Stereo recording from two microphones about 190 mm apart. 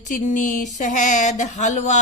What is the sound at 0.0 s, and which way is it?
Speech, 40° left (ahead or behind).